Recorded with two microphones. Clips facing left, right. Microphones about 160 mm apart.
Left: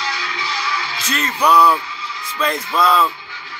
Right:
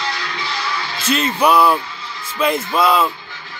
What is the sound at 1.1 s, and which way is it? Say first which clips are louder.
Speech: right 1 dB; 10° right (ahead or behind).